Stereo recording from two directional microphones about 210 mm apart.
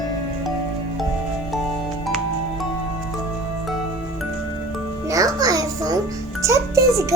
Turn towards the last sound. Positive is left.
turn(degrees=-15)  # may be behind; listen again after turning